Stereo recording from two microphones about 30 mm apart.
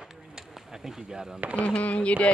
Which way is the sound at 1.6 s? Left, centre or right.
Left.